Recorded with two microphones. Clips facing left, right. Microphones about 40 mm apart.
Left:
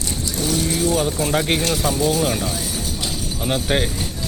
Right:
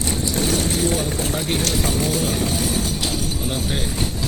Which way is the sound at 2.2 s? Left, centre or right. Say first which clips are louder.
Left 1 dB; left.